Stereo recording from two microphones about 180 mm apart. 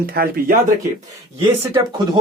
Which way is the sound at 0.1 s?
55° right (ahead or behind).